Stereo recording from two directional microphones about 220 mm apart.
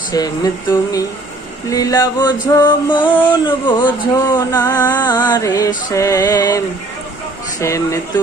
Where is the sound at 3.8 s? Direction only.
15° left (ahead or behind).